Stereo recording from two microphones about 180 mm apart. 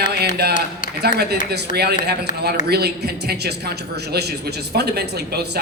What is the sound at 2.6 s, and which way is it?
A man's voice, 60° right (ahead or behind).